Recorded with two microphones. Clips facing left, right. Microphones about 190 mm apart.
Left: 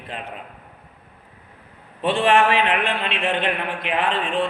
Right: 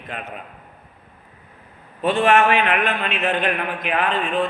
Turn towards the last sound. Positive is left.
turn(degrees=30)  # may be behind; listen again after turning